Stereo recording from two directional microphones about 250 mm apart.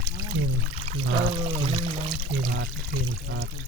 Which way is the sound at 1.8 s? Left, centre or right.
Right.